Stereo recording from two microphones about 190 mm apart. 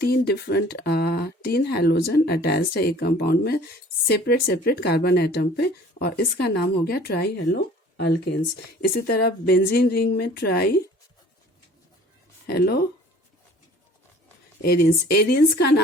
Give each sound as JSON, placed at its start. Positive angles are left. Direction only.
{"t": 0.0, "sound": "speech", "side_deg": 55}
{"t": 12.5, "sound": "speech", "side_deg": 55}
{"t": 14.6, "sound": "speech", "side_deg": 55}